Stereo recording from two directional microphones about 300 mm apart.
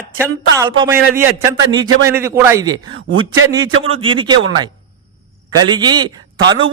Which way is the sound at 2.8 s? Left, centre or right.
Right.